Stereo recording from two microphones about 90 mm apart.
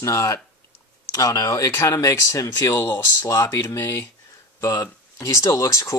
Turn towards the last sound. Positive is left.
turn(degrees=35)  # may be behind; listen again after turning